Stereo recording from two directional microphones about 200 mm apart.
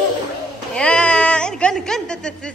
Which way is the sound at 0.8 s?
5° left (ahead or behind).